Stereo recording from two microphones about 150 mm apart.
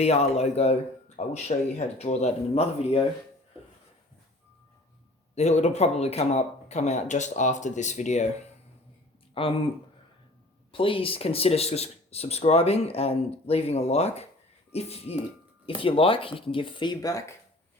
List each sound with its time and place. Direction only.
0.0 s speech: 45° left (ahead or behind)
5.3 s speech: 50° left (ahead or behind)
9.3 s speech: 35° left (ahead or behind)
10.7 s speech: 35° left (ahead or behind)